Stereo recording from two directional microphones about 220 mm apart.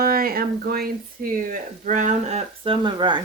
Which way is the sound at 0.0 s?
40° right (ahead or behind).